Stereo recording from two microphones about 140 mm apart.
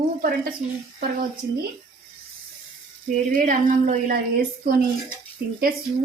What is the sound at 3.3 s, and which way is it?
Speech, 70° right (ahead or behind).